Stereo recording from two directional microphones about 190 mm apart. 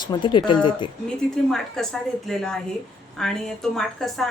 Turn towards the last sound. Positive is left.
turn(degrees=0)  # may be behind; listen again after turning